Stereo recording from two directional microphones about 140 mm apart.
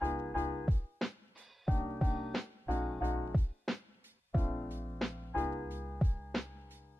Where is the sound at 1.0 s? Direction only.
Centre (ahead or behind).